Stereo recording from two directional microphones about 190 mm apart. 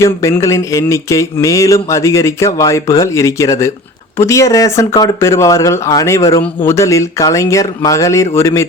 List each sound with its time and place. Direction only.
0.0 s speech: 15° left (ahead or behind)